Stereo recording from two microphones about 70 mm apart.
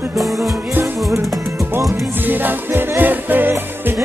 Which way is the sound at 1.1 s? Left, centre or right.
Right.